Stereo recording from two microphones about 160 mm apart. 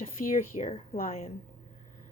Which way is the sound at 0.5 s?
45° left (ahead or behind).